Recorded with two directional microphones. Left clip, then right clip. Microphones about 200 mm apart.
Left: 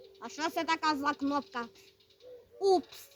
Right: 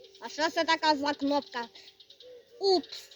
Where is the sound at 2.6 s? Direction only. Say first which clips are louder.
Right 1 dB; 20° left (ahead or behind).